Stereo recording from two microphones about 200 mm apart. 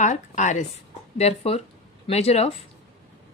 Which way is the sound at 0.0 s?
35° left (ahead or behind).